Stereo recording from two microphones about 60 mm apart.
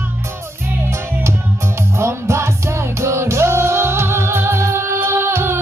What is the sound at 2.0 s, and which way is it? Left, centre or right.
Music, right.